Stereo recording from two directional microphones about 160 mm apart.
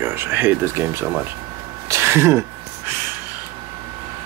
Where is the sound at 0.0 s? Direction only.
15° right (ahead or behind).